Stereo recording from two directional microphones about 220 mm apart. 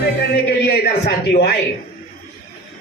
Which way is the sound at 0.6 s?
45° left (ahead or behind).